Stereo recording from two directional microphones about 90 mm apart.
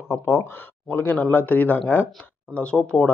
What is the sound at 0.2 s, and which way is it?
Speech, 30° left (ahead or behind).